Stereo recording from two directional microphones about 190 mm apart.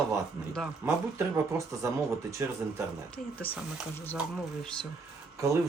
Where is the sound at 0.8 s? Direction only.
15° right (ahead or behind).